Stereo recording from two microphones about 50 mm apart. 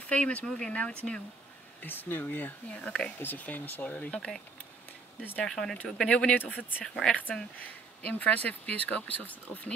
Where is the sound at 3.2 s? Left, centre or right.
Left.